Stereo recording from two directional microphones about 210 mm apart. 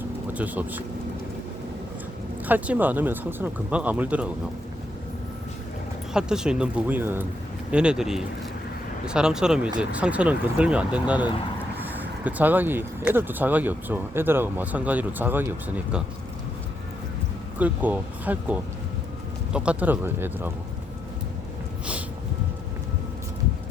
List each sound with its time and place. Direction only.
0.3 s speech: 10° right (ahead or behind)
2.5 s speech: 10° right (ahead or behind)
6.1 s speech: 5° right (ahead or behind)
17.6 s speech: 10° right (ahead or behind)